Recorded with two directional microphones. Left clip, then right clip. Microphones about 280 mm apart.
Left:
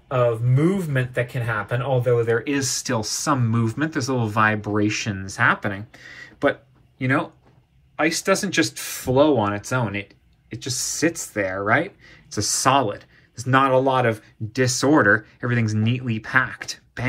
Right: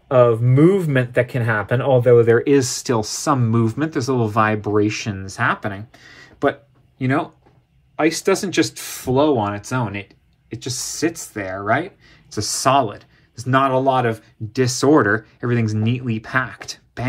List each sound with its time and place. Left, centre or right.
0.1 s speech: right